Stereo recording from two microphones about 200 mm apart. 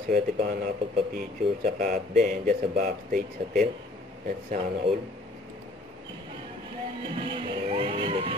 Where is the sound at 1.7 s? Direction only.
40° right (ahead or behind).